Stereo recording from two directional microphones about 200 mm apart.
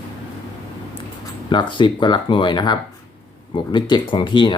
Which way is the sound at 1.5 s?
25° left (ahead or behind).